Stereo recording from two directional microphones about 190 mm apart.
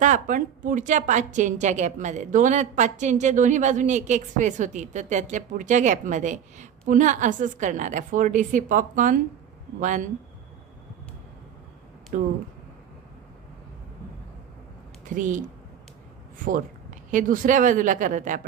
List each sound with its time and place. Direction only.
0.0 s a woman's voice: 40° right (ahead or behind)
12.1 s speech: 45° right (ahead or behind)
15.0 s a woman's voice: 45° right (ahead or behind)